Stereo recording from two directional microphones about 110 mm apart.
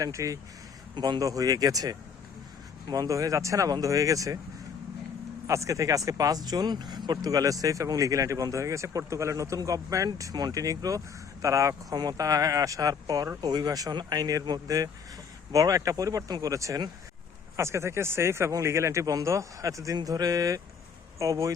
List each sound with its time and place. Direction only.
0.0 s speech: 30° right (ahead or behind)
0.9 s speech: 45° right (ahead or behind)
1.2 s speech: 35° right (ahead or behind)
5.5 s speech: 30° right (ahead or behind)